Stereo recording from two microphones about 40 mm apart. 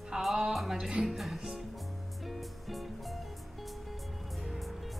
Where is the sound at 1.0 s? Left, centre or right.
Centre.